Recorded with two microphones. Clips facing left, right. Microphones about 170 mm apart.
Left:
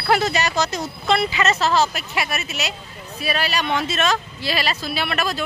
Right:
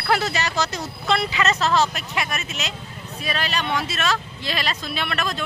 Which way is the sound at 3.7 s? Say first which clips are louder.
Left 4 dB; 25° left (ahead or behind).